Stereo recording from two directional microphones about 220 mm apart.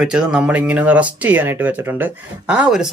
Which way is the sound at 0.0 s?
5° right (ahead or behind).